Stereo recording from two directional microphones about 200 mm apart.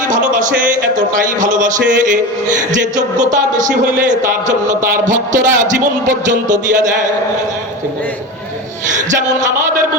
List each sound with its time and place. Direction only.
0.3 s music: 40° right (ahead or behind)
0.9 s a man's voice: 40° right (ahead or behind)
3.3 s a man's voice: 40° right (ahead or behind)